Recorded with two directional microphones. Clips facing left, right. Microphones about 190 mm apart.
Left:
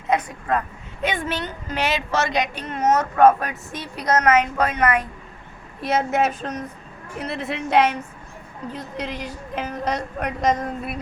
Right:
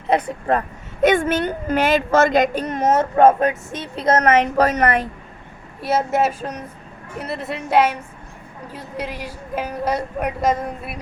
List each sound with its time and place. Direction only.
0.3 s a woman's voice: 35° right (ahead or behind)
1.0 s a woman's voice: 45° right (ahead or behind)
3.0 s a woman's voice: 25° right (ahead or behind)
5.8 s a woman's voice: 5° right (ahead or behind)